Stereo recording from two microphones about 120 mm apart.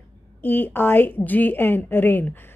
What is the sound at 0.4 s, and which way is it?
A woman's voice, 15° left (ahead or behind).